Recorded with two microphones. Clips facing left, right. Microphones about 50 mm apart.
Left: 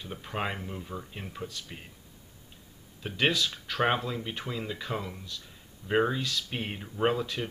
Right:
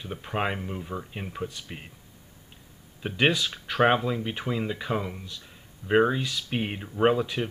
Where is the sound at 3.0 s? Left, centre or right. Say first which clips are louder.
Right 3 dB; centre.